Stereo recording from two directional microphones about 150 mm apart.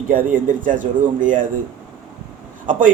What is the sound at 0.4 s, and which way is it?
A man's voice, 60° right (ahead or behind).